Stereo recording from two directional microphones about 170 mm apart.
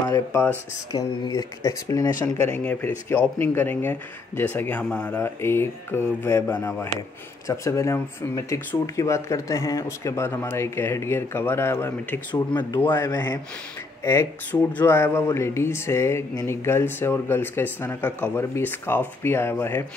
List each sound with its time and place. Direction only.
0.1 s speech: 15° left (ahead or behind)
12.3 s speech: 25° left (ahead or behind)
12.9 s speech: 15° left (ahead or behind)